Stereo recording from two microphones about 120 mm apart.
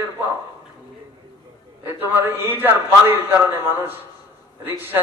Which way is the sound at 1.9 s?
15° right (ahead or behind).